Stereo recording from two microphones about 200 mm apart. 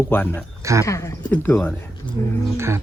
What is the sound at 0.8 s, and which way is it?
Speech, 15° left (ahead or behind).